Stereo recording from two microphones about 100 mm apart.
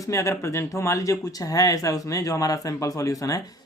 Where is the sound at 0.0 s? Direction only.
30° left (ahead or behind).